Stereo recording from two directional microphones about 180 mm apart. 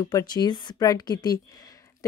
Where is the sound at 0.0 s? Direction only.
20° left (ahead or behind).